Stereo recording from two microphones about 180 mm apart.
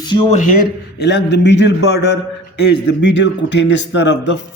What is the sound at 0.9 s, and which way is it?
A man's voice, 75° left (ahead or behind).